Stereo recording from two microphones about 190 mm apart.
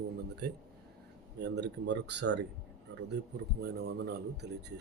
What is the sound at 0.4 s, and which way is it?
A man's voice, 60° right (ahead or behind).